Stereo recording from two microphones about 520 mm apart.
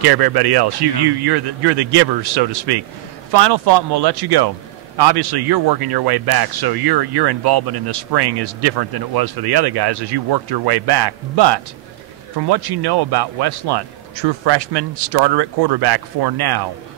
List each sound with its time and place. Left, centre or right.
0.0 s speech: right